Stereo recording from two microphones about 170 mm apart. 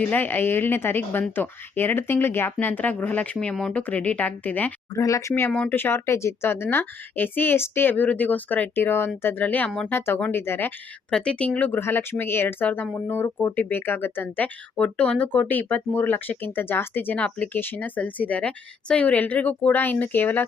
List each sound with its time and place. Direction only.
0.0 s speech: 10° left (ahead or behind)